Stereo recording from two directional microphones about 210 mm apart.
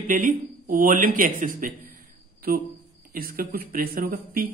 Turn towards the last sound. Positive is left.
turn(degrees=-45)  # may be behind; listen again after turning